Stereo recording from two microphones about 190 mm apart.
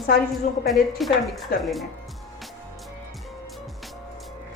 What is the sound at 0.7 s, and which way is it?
Speech, centre (ahead or behind).